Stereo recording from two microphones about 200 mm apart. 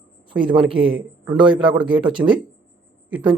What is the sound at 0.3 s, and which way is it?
A man's voice, 25° right (ahead or behind).